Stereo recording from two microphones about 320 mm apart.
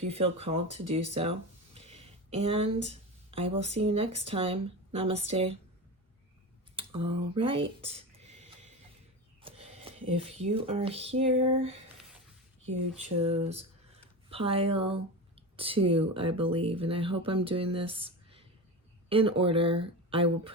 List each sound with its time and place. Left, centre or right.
0.0 s speech: centre
6.7 s speech: centre
9.4 s a sound: centre
10.2 s speech: centre
14.3 s speech: centre